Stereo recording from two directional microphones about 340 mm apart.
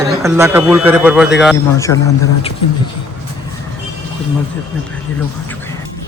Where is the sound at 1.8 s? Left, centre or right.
Centre.